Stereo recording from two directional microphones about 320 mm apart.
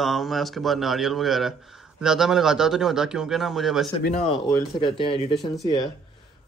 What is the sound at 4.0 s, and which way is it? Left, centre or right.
Speech, centre.